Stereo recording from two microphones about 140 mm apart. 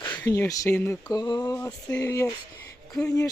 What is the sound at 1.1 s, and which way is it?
Speech, 30° left (ahead or behind).